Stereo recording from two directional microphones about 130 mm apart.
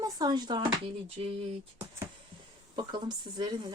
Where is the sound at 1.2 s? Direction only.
50° right (ahead or behind).